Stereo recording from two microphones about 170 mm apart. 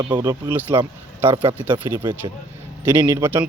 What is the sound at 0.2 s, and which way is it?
Speech, 15° right (ahead or behind).